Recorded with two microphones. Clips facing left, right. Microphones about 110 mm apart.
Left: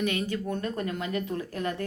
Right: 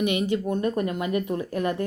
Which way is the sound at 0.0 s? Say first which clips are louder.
Right 5 dB; 15° right (ahead or behind).